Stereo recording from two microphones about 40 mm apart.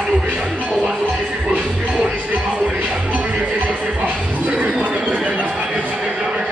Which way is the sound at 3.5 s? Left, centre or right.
Right.